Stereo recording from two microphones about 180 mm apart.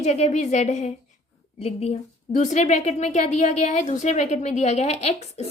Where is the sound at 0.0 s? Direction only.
40° left (ahead or behind).